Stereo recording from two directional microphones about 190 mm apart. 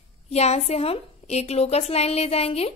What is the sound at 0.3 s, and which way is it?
A woman's voice, 35° left (ahead or behind).